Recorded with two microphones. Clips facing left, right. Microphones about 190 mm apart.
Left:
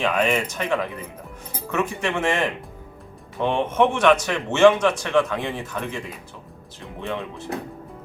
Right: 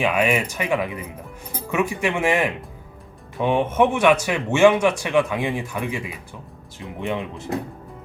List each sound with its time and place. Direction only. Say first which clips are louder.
0.0 s a man's voice: right 1 dB; 10° right (ahead or behind)
7.0 s a man's voice: right 3 dB; 15° right (ahead or behind)